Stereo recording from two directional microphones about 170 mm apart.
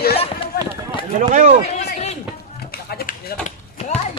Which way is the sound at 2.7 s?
65° left (ahead or behind).